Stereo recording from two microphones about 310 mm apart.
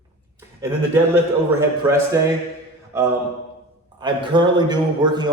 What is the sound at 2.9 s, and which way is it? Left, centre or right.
A man's voice, centre.